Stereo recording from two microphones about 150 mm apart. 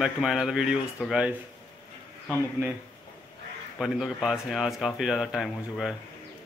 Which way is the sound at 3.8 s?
Centre (ahead or behind).